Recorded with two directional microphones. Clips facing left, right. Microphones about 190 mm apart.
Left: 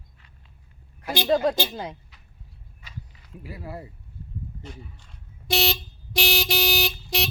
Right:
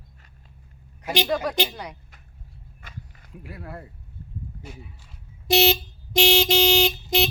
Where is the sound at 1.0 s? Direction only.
20° right (ahead or behind).